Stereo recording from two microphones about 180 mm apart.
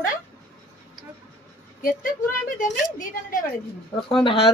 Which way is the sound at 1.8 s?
55° left (ahead or behind).